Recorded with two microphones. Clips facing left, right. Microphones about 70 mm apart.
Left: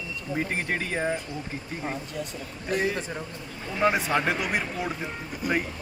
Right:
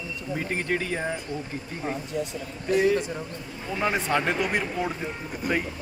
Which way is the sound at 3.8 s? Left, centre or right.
Centre.